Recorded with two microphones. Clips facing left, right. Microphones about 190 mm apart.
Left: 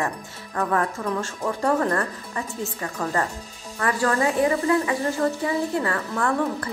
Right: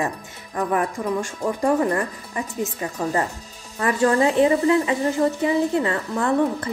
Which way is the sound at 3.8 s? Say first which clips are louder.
Right 4 dB; 20° right (ahead or behind).